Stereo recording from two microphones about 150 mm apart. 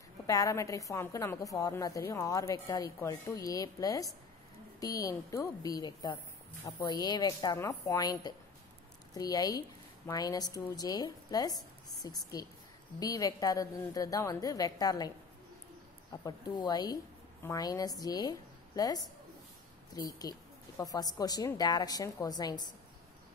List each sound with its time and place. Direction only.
0.3 s a woman's voice: 20° left (ahead or behind)